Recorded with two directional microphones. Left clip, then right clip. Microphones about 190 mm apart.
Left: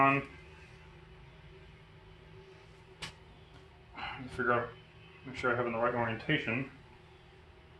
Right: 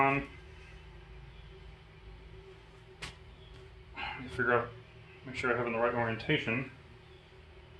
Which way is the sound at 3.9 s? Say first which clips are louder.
Right 2 dB; 30° left (ahead or behind).